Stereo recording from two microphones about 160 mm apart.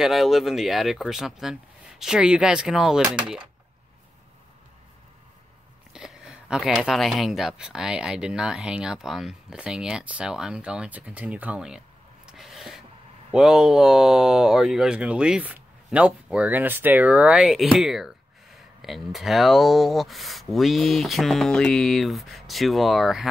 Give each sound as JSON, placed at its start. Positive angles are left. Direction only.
{"t": 0.0, "sound": "speech", "side_deg": 0}
{"t": 5.9, "sound": "speech", "side_deg": -5}
{"t": 12.3, "sound": "a sound", "side_deg": 0}
{"t": 13.3, "sound": "speech", "side_deg": -5}